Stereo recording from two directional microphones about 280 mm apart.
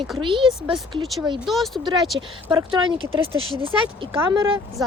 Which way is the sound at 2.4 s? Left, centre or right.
Centre.